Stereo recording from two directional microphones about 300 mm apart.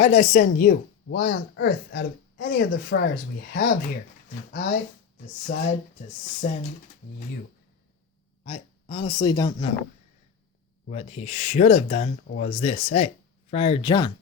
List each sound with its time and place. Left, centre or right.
0.0 s speech: left
5.2 s speech: left
8.4 s speech: left
10.8 s speech: left